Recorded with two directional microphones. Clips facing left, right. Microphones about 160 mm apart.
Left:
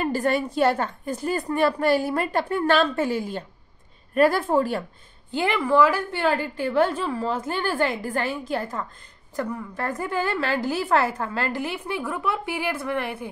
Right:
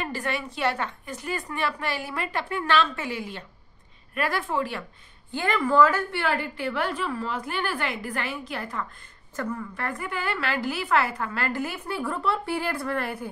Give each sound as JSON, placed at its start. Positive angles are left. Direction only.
{"t": 0.0, "sound": "a woman's voice", "side_deg": 40}
{"t": 5.4, "sound": "a woman's voice", "side_deg": 10}
{"t": 9.9, "sound": "a woman's voice", "side_deg": 35}
{"t": 12.0, "sound": "speech", "side_deg": 0}
{"t": 12.3, "sound": "a woman's voice", "side_deg": 15}